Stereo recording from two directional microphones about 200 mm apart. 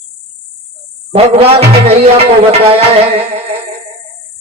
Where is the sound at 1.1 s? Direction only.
30° right (ahead or behind).